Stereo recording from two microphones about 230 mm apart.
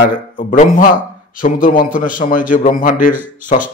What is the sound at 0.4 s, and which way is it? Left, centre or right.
A man's voice, left.